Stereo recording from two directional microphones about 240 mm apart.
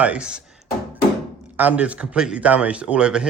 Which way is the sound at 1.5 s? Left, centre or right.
Centre.